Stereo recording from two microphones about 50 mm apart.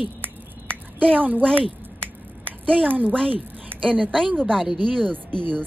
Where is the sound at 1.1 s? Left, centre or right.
Right.